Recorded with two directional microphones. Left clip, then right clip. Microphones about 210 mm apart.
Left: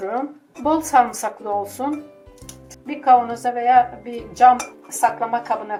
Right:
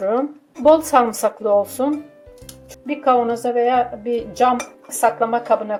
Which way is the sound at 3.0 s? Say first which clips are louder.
Left 2 dB; 50° right (ahead or behind).